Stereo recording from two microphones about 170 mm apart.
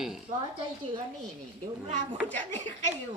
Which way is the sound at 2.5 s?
50° right (ahead or behind).